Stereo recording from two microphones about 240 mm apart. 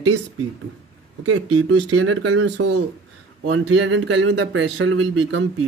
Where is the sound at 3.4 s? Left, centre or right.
Right.